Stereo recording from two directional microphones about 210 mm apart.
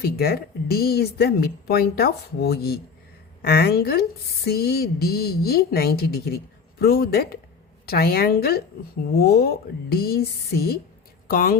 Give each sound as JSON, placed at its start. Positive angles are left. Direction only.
{"t": 0.0, "sound": "speech", "side_deg": 45}